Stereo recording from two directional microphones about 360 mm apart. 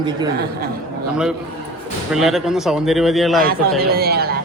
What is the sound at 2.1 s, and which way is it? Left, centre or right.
Speech, centre.